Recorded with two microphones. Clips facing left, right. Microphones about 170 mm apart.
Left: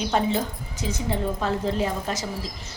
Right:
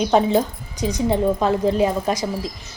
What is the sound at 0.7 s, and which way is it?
Speech, 15° right (ahead or behind).